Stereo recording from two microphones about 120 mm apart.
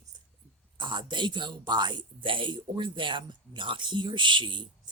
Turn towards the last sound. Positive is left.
turn(degrees=-40)  # may be behind; listen again after turning